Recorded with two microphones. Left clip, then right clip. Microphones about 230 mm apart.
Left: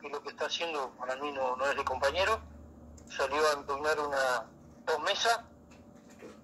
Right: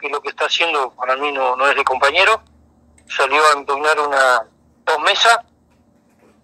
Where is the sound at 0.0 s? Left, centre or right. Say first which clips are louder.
Right 16 dB; right.